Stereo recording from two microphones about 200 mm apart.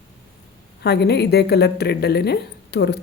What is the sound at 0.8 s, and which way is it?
Speech, 55° left (ahead or behind).